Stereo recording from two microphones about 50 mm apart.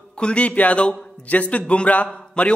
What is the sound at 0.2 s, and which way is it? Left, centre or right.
A man's voice, left.